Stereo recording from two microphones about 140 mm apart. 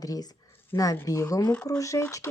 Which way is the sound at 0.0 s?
25° left (ahead or behind).